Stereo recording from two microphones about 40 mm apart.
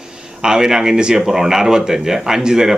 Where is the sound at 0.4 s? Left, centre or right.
Centre.